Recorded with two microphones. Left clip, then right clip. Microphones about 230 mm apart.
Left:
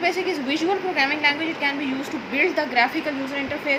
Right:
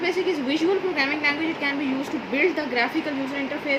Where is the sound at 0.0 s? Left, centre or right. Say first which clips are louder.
Left 1 dB; left.